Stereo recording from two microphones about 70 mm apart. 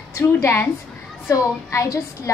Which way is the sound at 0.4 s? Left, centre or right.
Left.